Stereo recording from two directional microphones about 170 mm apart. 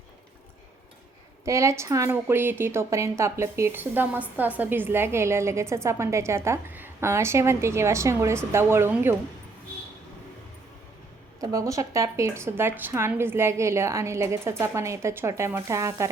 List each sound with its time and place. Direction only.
1.5 s a woman's voice: 15° right (ahead or behind)
11.3 s a woman's voice: 20° right (ahead or behind)